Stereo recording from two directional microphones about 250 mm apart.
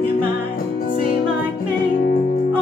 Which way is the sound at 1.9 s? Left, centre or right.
Left.